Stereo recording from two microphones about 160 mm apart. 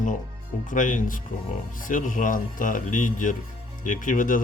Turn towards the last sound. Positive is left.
turn(degrees=55)  # may be behind; listen again after turning